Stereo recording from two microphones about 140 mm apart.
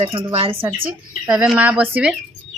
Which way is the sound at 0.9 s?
5° right (ahead or behind).